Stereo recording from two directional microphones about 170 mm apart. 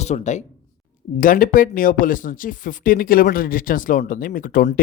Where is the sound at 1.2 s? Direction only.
55° left (ahead or behind).